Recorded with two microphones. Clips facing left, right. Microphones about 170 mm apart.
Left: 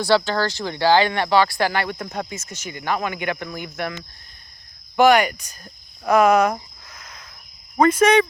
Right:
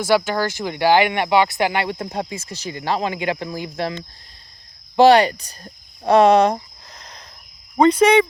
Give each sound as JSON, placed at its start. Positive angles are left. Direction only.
{"t": 0.0, "sound": "speech", "side_deg": -15}
{"t": 7.9, "sound": "speech", "side_deg": -10}